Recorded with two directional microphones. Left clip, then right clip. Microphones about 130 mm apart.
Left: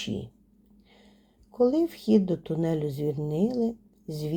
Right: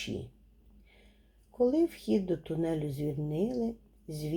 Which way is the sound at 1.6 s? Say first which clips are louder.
Left 4 dB; 15° left (ahead or behind).